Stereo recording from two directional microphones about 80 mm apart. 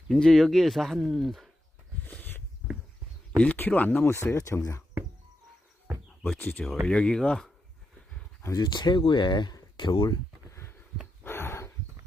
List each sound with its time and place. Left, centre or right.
0.1 s speech: centre
2.0 s a sound: left
3.3 s speech: centre; by 4.8 s left
6.4 s speech: left
6.8 s speech: centre
8.6 s speech: left
9.7 s speech: left
10.5 s a sound: left
11.2 s dog: left